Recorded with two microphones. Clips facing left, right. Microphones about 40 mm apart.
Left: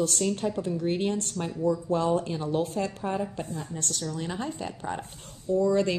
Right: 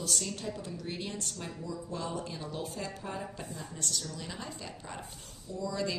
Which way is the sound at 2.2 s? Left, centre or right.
Left.